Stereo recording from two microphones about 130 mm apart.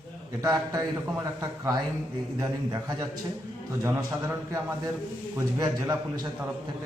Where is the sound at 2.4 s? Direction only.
25° right (ahead or behind).